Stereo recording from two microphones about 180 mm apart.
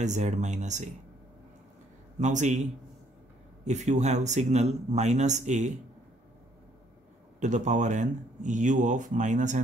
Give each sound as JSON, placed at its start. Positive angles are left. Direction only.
{"t": 0.0, "sound": "speech", "side_deg": -40}
{"t": 2.1, "sound": "speech", "side_deg": -40}
{"t": 7.3, "sound": "speech", "side_deg": -40}